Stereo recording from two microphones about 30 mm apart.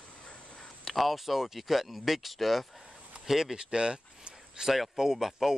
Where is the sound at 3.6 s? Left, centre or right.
Right.